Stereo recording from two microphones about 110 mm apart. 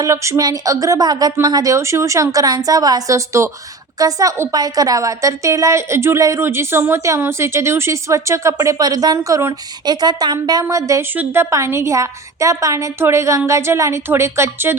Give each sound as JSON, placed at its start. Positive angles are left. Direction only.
{"t": 0.0, "sound": "a woman's voice", "side_deg": -30}
{"t": 9.8, "sound": "speech", "side_deg": -40}
{"t": 11.1, "sound": "a woman's voice", "side_deg": -20}